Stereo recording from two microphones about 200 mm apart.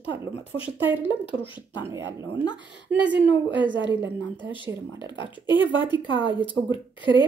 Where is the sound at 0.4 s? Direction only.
30° left (ahead or behind).